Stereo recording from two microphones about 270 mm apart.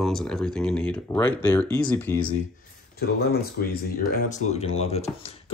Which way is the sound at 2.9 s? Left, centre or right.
Left.